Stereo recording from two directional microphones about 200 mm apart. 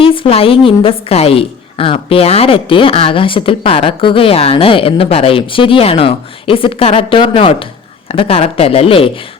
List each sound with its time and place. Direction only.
0.0 s a woman's voice: 25° left (ahead or behind)